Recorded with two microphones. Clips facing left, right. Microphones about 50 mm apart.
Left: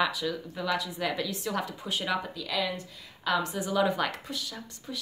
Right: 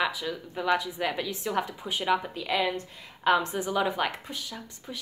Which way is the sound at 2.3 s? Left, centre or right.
Right.